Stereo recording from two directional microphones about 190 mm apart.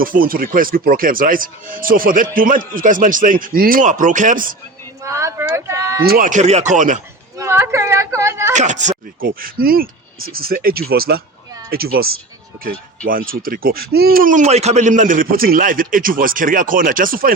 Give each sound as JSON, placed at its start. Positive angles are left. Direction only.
{"t": 0.0, "sound": "speech", "side_deg": -50}
{"t": 5.0, "sound": "speech", "side_deg": -15}
{"t": 6.0, "sound": "speech", "side_deg": -50}
{"t": 7.3, "sound": "a sound", "side_deg": -15}
{"t": 8.5, "sound": "speech", "side_deg": -40}
{"t": 13.1, "sound": "speech", "side_deg": -50}